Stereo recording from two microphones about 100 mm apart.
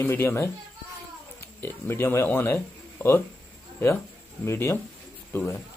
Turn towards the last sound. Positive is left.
turn(degrees=25)  # may be behind; listen again after turning